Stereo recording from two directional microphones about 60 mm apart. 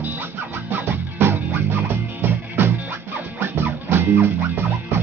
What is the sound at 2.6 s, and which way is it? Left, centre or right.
Music, right.